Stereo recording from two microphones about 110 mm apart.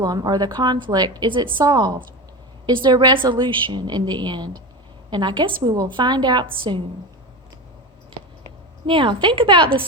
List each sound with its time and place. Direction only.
0.0 s a woman's voice: 35° right (ahead or behind)
8.9 s a woman's voice: 50° right (ahead or behind)